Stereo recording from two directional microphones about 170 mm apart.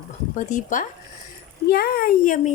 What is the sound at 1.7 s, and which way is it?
Speech, 65° left (ahead or behind).